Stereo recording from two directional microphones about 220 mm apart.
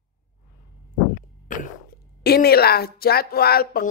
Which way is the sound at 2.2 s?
45° left (ahead or behind).